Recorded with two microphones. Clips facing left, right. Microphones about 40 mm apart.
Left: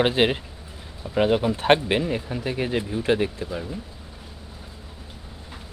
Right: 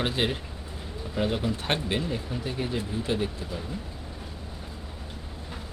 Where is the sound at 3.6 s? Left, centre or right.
Centre.